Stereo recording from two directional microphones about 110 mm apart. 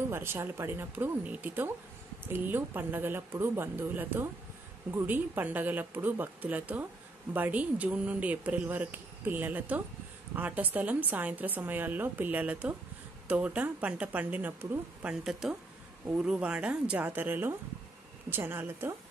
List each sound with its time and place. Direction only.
0.1 s speech: 20° right (ahead or behind)
16.2 s speech: 10° right (ahead or behind)